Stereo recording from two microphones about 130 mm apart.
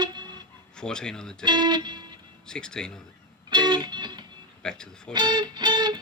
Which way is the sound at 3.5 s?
35° right (ahead or behind).